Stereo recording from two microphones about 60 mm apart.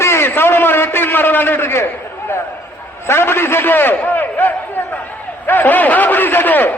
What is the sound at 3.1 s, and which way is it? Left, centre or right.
A man's voice, left.